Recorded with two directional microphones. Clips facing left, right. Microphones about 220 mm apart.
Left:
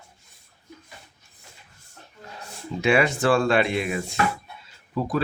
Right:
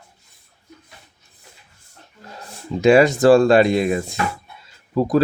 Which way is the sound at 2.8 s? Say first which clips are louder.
Right 8 dB; 40° right (ahead or behind).